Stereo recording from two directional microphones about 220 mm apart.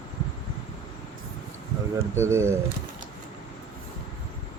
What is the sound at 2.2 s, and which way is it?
Speech, 10° right (ahead or behind).